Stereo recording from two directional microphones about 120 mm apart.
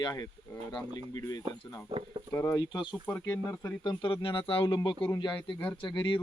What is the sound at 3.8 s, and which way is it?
Speech, 40° left (ahead or behind).